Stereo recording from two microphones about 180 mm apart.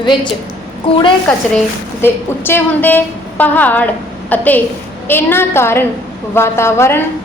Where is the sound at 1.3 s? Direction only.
5° left (ahead or behind).